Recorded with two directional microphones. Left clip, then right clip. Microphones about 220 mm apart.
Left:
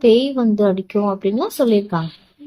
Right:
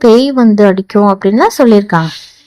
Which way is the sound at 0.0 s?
35° right (ahead or behind).